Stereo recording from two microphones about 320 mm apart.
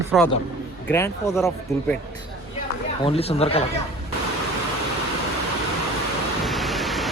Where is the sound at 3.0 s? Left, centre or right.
Centre.